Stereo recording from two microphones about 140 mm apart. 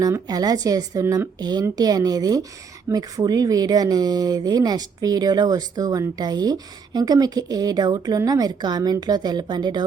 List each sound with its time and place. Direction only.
0.0 s speech: 25° right (ahead or behind)